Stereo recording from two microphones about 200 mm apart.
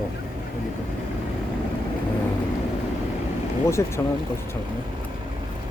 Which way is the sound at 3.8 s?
15° left (ahead or behind).